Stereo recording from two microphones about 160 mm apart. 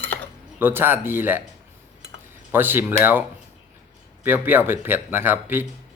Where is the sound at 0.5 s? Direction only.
15° right (ahead or behind).